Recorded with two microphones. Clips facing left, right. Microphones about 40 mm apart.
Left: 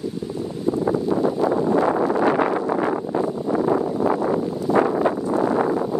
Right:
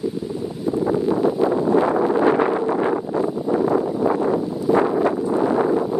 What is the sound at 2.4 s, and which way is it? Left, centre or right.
Wind noise, centre.